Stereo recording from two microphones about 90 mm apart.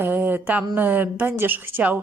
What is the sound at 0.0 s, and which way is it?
A woman's voice, 20° right (ahead or behind).